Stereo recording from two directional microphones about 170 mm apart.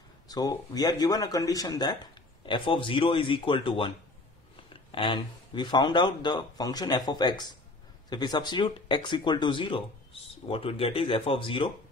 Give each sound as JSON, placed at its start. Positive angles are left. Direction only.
{"t": 0.3, "sound": "speech", "side_deg": 20}